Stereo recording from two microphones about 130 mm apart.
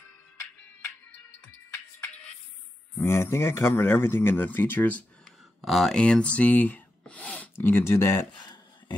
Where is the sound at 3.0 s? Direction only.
20° left (ahead or behind).